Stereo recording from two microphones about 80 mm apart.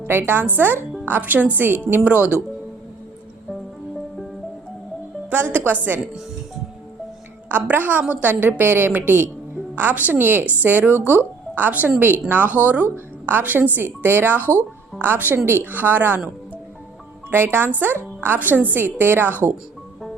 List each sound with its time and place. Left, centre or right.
0.0 s speech: right
5.3 s speech: right
7.4 s speech: right
17.3 s speech: right